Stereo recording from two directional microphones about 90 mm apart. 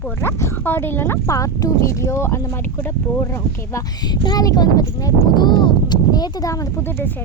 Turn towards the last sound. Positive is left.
turn(degrees=25)  # may be behind; listen again after turning